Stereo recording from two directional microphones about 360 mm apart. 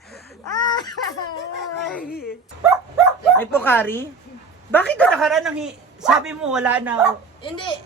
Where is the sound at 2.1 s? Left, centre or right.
Left.